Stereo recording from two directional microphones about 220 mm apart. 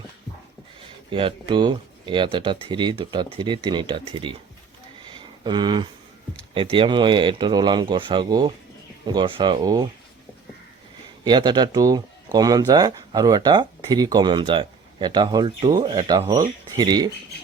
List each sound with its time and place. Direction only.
1.1 s speech: 25° right (ahead or behind)
5.0 s a sound: 20° right (ahead or behind)
6.5 s speech: 25° right (ahead or behind)
11.2 s speech: 20° right (ahead or behind)